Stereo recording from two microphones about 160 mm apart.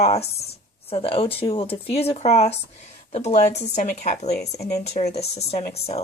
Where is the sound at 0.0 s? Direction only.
40° left (ahead or behind).